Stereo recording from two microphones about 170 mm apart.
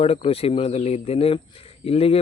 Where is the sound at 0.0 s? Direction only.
35° left (ahead or behind).